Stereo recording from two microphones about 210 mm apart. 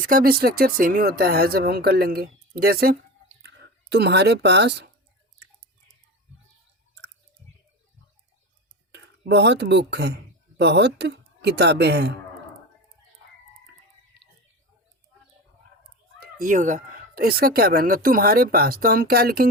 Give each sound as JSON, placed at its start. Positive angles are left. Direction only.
{"t": 0.0, "sound": "speech", "side_deg": -45}
{"t": 8.9, "sound": "speech", "side_deg": -55}
{"t": 16.2, "sound": "speech", "side_deg": -40}